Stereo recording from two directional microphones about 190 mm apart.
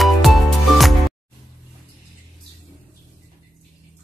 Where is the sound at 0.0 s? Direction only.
Centre (ahead or behind).